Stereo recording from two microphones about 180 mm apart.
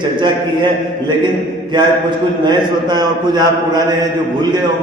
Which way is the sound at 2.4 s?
25° right (ahead or behind).